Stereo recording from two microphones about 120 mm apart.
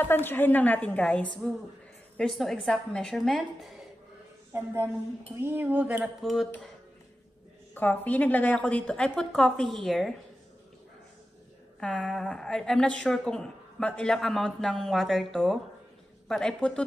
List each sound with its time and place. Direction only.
0.0 s a woman's voice: 15° left (ahead or behind); by 3.7 s centre (ahead or behind)
4.5 s a woman's voice: 20° right (ahead or behind)
5.4 s a sound: 15° right (ahead or behind)
6.2 s a woman's voice: centre (ahead or behind)
7.7 s a woman's voice: 15° left (ahead or behind)
11.8 s a woman's voice: 5° left (ahead or behind)